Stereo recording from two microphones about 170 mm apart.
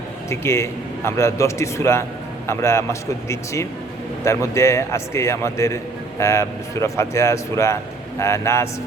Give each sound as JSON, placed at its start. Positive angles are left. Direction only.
{"t": 0.3, "sound": "speech", "side_deg": 15}